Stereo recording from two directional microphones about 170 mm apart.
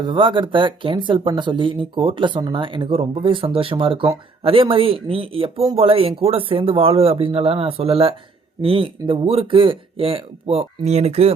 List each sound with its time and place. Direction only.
0.0 s speech: 30° right (ahead or behind)